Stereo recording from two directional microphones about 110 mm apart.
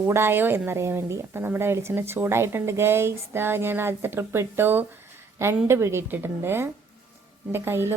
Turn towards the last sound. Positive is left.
turn(degrees=-20)  # may be behind; listen again after turning